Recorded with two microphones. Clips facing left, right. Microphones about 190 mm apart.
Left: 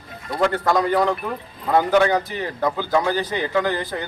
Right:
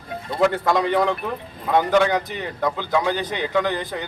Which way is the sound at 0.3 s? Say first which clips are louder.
Even; 5° right (ahead or behind).